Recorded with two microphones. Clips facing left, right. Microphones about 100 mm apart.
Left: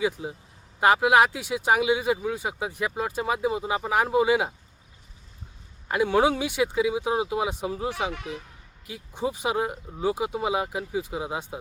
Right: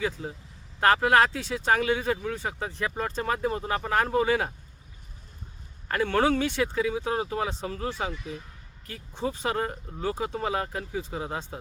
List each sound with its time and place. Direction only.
0.0 s speech: 10° left (ahead or behind)
5.9 s speech: 10° left (ahead or behind)
8.1 s speech: 75° left (ahead or behind)
8.9 s speech: 15° left (ahead or behind)